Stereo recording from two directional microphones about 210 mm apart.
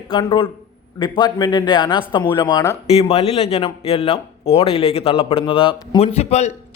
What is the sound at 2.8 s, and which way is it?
Speech, 30° left (ahead or behind).